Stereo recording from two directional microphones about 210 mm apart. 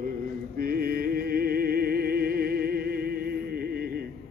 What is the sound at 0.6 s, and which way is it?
Music, 45° right (ahead or behind).